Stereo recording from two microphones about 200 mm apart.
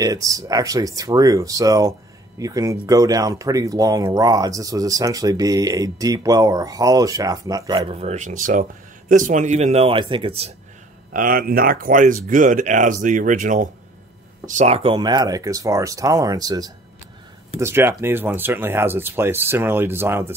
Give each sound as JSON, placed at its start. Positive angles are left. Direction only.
{"t": 0.0, "sound": "speech", "side_deg": -15}
{"t": 11.1, "sound": "speech", "side_deg": -45}